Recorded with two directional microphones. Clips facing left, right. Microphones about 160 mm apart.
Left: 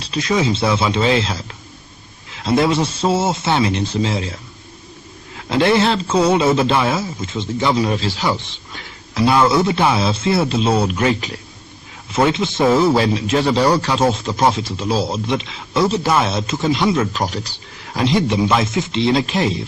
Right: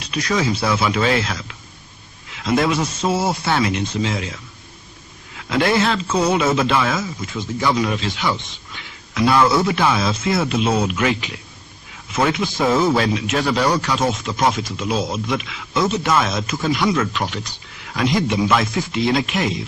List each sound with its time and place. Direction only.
0.0 s speech: 25° left (ahead or behind)
5.4 s a man's voice: 30° left (ahead or behind)
9.2 s speech: 20° left (ahead or behind)
12.1 s speech: 25° left (ahead or behind)